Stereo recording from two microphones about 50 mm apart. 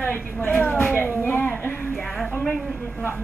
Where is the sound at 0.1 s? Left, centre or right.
Left.